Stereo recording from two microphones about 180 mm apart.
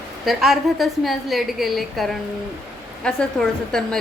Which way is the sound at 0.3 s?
Centre (ahead or behind).